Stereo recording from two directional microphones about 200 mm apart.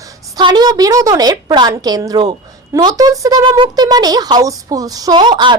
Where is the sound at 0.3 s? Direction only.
20° right (ahead or behind).